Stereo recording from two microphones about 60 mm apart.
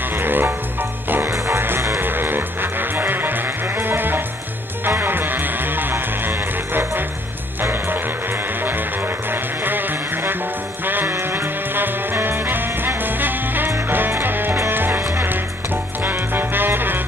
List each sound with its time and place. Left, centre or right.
0.2 s music: right
2.0 s music: right
9.3 s music: right